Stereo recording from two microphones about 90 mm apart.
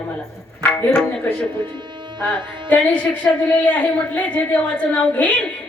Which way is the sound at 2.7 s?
15° left (ahead or behind).